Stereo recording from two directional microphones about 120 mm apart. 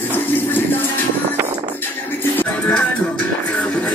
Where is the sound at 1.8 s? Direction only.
15° left (ahead or behind).